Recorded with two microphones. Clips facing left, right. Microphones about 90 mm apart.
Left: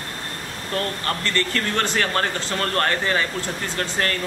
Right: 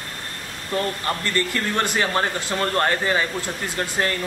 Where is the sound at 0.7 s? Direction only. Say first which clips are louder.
Right 1 dB; 15° right (ahead or behind).